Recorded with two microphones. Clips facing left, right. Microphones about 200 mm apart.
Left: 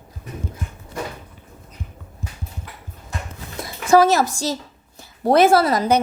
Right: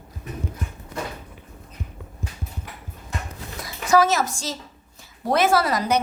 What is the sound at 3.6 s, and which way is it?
A woman's voice, 30° left (ahead or behind).